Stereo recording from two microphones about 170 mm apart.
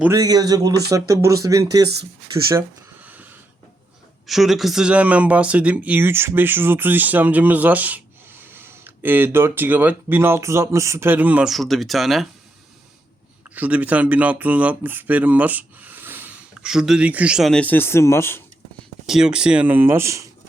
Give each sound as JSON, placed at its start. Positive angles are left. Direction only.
{"t": 0.0, "sound": "speech", "side_deg": -20}
{"t": 2.6, "sound": "a sound", "side_deg": -10}
{"t": 4.3, "sound": "speech", "side_deg": 0}
{"t": 13.5, "sound": "speech", "side_deg": -10}
{"t": 19.0, "sound": "speech", "side_deg": -5}